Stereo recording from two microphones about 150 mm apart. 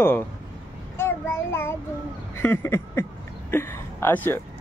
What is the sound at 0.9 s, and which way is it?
Child singing, 15° left (ahead or behind).